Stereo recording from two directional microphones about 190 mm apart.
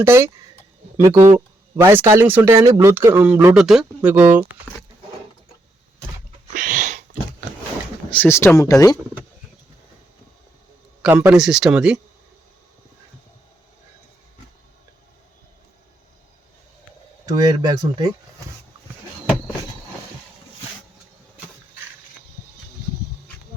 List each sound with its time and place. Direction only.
0.0 s speech: 15° right (ahead or behind)
6.5 s a sound: 40° right (ahead or behind)
8.1 s speech: 10° left (ahead or behind)
11.0 s speech: 10° right (ahead or behind)
17.2 s speech: 20° right (ahead or behind)